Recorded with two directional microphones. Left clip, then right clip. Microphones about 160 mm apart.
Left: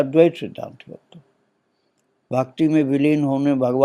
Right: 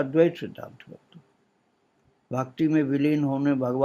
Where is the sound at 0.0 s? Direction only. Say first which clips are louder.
Left 6 dB; 30° left (ahead or behind).